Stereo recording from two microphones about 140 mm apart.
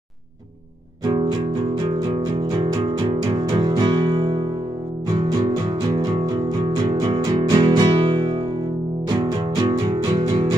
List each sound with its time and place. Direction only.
2.4 s music: 30° right (ahead or behind)
9.6 s music: 35° right (ahead or behind)